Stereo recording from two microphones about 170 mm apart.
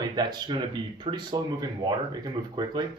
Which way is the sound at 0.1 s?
25° right (ahead or behind).